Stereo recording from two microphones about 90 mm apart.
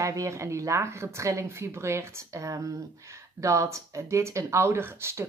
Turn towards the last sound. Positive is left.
turn(degrees=-30)  # may be behind; listen again after turning